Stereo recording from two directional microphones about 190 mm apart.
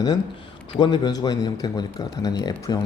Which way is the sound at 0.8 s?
25° left (ahead or behind).